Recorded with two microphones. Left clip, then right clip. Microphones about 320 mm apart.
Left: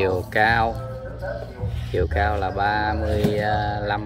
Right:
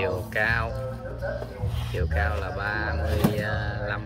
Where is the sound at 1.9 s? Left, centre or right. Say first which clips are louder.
Left 7 dB; centre.